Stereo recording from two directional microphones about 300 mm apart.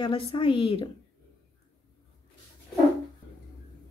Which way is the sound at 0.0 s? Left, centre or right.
Centre.